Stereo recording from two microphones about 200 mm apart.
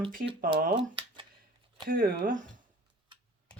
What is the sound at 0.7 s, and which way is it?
Speech, 25° right (ahead or behind).